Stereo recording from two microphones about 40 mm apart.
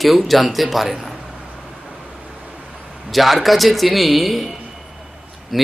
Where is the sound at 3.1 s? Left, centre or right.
Centre.